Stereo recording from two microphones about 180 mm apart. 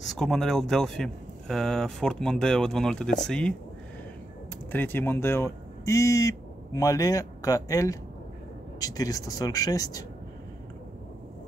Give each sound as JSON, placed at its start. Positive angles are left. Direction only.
{"t": 0.0, "sound": "speech", "side_deg": 0}
{"t": 4.7, "sound": "speech", "side_deg": 10}